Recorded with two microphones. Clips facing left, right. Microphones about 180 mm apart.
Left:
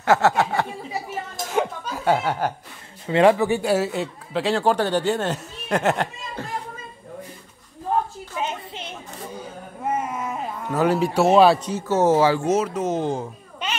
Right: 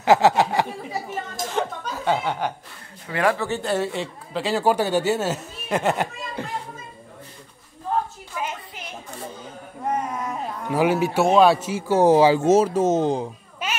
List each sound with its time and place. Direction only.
0.0 s speech: 15° right (ahead or behind)
1.3 s chuckle: 10° left (ahead or behind)
3.1 s a man's voice: 25° left (ahead or behind); by 6.0 s centre (ahead or behind)
6.4 s a sound: 15° right (ahead or behind)
8.4 s a sound: 25° left (ahead or behind)
9.8 s a sound: 5° left (ahead or behind)
10.7 s a man's voice: 5° right (ahead or behind); by 12.9 s 30° right (ahead or behind)
13.0 s speech: 20° right (ahead or behind)
13.6 s babbling: 5° right (ahead or behind)